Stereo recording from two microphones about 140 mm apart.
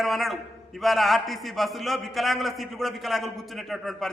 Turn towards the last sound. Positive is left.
turn(degrees=0)  # may be behind; listen again after turning